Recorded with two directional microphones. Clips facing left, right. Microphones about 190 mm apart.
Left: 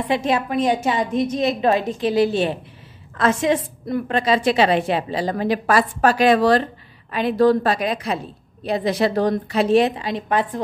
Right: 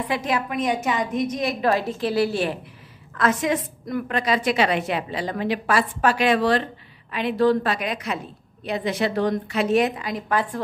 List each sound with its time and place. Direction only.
0.1 s a woman's voice: 25° left (ahead or behind)